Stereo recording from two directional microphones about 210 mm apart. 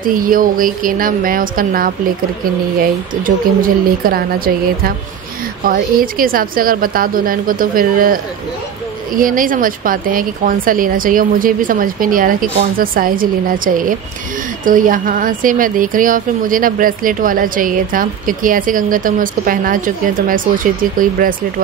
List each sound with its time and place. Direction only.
0.0 s a woman's voice: 40° right (ahead or behind)
5.7 s a woman's voice: 45° right (ahead or behind)